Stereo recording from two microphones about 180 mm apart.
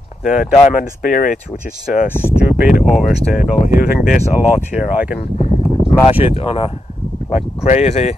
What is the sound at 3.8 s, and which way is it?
Speech, 50° left (ahead or behind).